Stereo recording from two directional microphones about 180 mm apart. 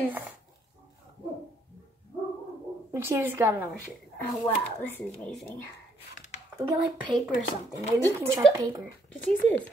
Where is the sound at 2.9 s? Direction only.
15° right (ahead or behind).